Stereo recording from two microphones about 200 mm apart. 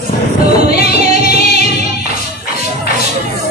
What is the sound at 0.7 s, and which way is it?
Music, 50° left (ahead or behind).